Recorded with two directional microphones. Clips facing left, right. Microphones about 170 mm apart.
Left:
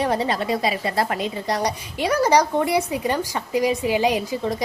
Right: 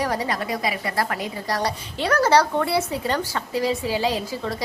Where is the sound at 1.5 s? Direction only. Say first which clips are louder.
Even; 15° left (ahead or behind).